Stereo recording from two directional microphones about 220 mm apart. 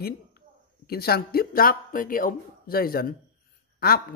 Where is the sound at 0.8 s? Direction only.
45° left (ahead or behind).